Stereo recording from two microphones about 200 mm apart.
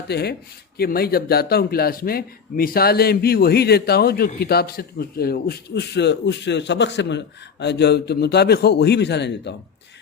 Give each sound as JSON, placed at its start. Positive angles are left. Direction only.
{"t": 0.1, "sound": "speech", "side_deg": 55}